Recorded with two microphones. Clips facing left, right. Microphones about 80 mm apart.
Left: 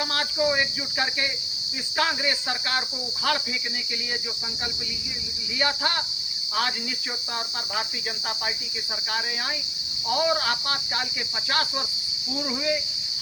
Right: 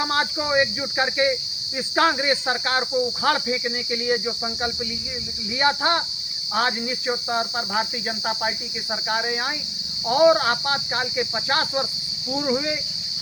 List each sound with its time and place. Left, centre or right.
0.0 s cricket: right
2.0 s speech: right
5.5 s speech: right
10.1 s speech: right
12.4 s cricket: right